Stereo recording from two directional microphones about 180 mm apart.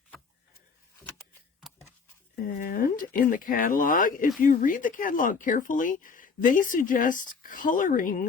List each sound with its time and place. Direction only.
2.5 s speech: 50° left (ahead or behind)